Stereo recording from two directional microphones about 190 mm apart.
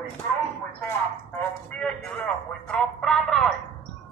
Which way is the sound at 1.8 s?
5° left (ahead or behind).